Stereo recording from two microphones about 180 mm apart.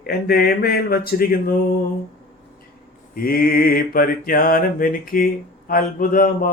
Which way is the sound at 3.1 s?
55° left (ahead or behind).